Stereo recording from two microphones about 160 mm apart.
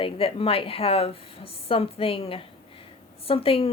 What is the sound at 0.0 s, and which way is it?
A woman's voice, 35° left (ahead or behind).